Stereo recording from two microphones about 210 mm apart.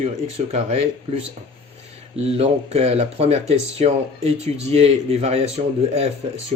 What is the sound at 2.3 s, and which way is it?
Speech, 30° right (ahead or behind).